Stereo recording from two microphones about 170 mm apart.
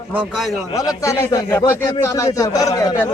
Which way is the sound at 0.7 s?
20° left (ahead or behind).